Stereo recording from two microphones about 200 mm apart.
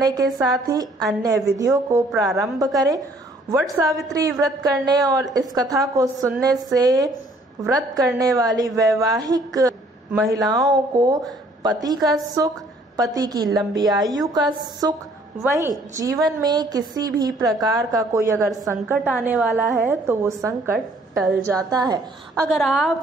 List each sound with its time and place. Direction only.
0.0 s a woman's voice: 20° right (ahead or behind)
16.0 s a woman's voice: 20° right (ahead or behind)
22.5 s a woman's voice: centre (ahead or behind)